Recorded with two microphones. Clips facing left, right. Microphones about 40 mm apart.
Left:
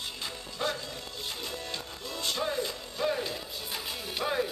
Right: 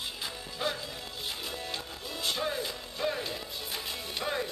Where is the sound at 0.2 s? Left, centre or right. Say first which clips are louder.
Left 1 dB; centre.